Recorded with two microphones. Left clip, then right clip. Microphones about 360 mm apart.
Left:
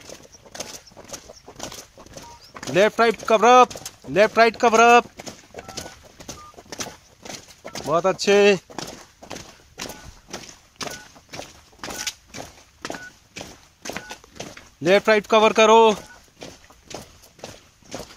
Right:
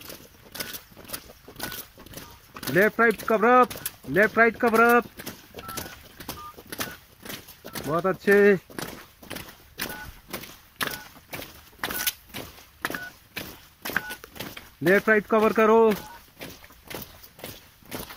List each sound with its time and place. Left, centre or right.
0.5 s vehicle: centre
2.6 s speech: centre
6.7 s a sound: centre
7.2 s walk: centre
7.9 s speech: centre
12.0 s a sound: centre
14.8 s speech: centre